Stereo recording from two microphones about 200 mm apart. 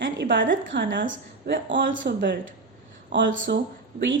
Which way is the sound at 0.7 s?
65° right (ahead or behind).